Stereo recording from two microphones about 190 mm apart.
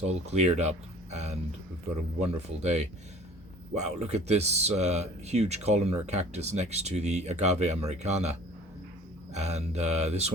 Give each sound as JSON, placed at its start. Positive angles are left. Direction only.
{"t": 0.1, "sound": "speech", "side_deg": -35}